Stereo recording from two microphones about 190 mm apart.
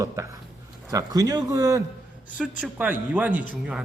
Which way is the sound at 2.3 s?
5° right (ahead or behind).